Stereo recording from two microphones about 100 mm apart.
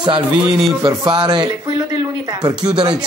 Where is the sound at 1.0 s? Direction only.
50° right (ahead or behind).